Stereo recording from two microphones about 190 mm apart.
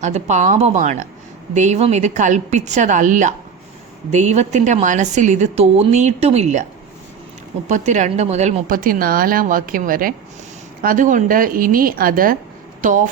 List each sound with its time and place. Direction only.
0.0 s a woman's voice: 40° right (ahead or behind)
7.7 s speech: 40° right (ahead or behind)